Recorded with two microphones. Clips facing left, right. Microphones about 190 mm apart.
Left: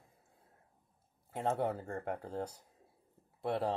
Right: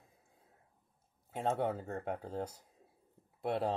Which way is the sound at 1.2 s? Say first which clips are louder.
Even; centre (ahead or behind).